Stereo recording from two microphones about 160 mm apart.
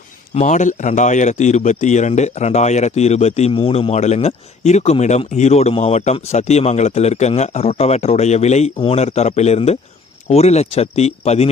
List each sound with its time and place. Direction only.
0.3 s a man's voice: 50° left (ahead or behind)